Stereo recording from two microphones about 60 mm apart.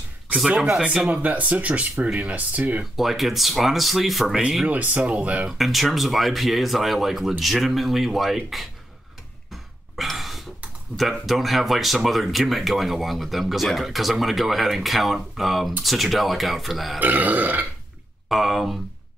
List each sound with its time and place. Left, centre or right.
0.7 s speech: centre
1.2 s speech: right
2.8 s speech: centre
4.6 s speech: right
5.6 s speech: centre
9.5 s a sound: centre
11.0 s speech: centre
17.0 s speech: right
18.3 s speech: centre